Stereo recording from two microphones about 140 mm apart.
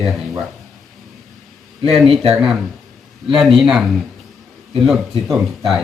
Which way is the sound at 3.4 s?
5° right (ahead or behind).